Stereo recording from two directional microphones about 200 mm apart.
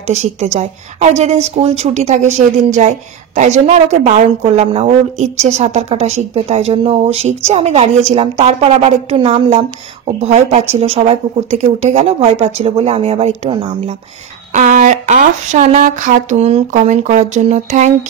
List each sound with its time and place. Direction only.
0.0 s a woman's voice: 35° right (ahead or behind)
14.5 s a woman's voice: 40° right (ahead or behind)